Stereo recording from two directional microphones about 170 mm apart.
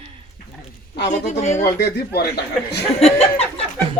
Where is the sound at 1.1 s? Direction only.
40° left (ahead or behind).